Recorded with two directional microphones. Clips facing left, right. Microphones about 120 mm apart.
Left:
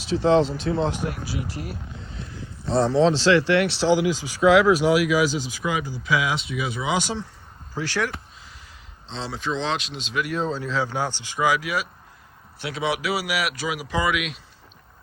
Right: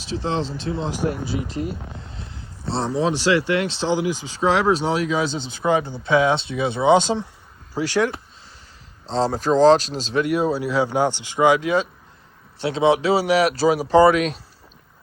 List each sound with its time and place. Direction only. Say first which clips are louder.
1.0 s speech: right 5 dB; 25° right (ahead or behind)
2.2 s a sound: even; 30° right (ahead or behind)
3.0 s speech: even; 15° right (ahead or behind)
9.0 s speech: right 9 dB; 40° right (ahead or behind)
10.2 s speech: right 6 dB; 10° right (ahead or behind); by 14.4 s 35° right (ahead or behind)